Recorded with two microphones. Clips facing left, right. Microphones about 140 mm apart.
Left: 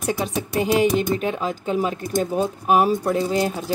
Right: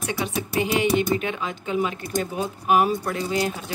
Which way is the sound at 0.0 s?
40° left (ahead or behind).